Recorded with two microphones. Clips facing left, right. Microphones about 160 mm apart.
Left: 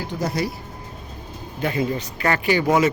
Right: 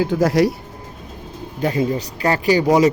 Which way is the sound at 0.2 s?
90° right.